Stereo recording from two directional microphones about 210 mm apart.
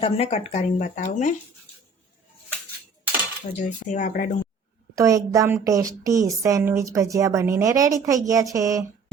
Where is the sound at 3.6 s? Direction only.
35° left (ahead or behind).